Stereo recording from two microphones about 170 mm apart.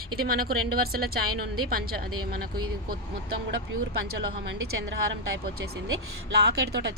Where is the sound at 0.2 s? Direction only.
60° right (ahead or behind).